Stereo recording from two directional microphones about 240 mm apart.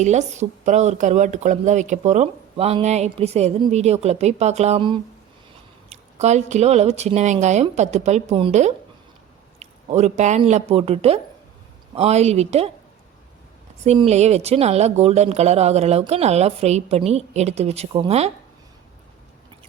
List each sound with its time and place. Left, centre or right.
0.0 s a woman's voice: right
14.1 s a woman's voice: right